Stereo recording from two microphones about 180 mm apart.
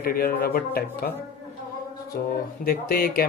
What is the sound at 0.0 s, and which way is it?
Speech, 60° left (ahead or behind).